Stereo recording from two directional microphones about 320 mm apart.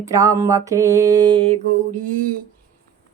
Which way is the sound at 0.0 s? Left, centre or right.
Centre.